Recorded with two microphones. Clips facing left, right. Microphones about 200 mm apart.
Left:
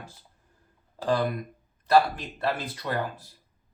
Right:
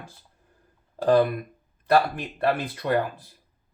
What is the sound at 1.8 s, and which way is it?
Speech, 60° right (ahead or behind).